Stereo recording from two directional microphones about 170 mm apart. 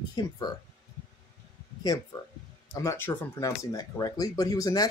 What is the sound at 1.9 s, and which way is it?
Speech, 20° left (ahead or behind).